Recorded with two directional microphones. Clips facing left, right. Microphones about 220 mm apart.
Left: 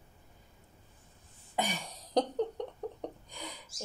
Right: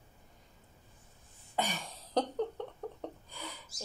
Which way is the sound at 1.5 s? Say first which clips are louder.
Left 1 dB; 15° left (ahead or behind).